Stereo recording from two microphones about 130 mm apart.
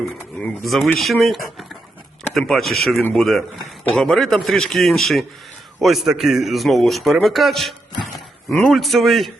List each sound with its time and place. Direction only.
0.0 s a man's voice: centre (ahead or behind)
8.4 s speech: 20° left (ahead or behind)
8.7 s a man's voice: centre (ahead or behind)